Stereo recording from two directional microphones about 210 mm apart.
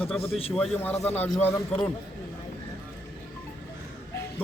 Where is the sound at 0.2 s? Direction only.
30° left (ahead or behind).